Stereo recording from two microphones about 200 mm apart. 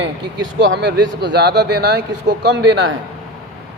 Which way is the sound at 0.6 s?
65° right (ahead or behind).